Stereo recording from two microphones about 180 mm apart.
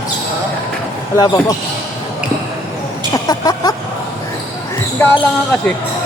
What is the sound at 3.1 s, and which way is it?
Speech, 20° left (ahead or behind).